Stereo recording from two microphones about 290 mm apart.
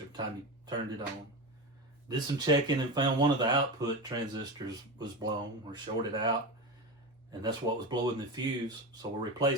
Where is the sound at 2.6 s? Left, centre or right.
Centre.